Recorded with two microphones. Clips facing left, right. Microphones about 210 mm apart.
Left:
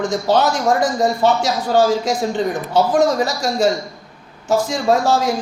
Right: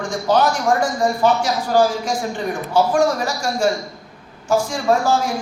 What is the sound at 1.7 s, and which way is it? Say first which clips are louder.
Speech: left 2 dB; 20° left (ahead or behind).